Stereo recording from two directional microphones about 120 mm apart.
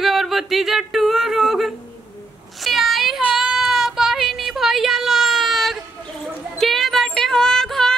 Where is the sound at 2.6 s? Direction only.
Centre (ahead or behind).